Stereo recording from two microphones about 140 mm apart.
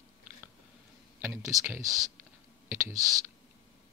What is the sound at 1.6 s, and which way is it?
Speech, 20° right (ahead or behind).